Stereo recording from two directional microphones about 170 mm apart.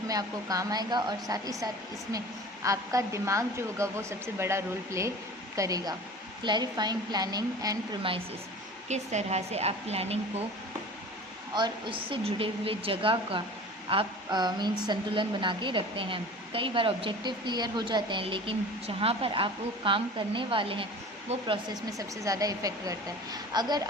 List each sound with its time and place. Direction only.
0.1 s a woman's voice: 20° right (ahead or behind)
8.9 s a woman's voice: 40° right (ahead or behind)
11.5 s a woman's voice: 30° right (ahead or behind)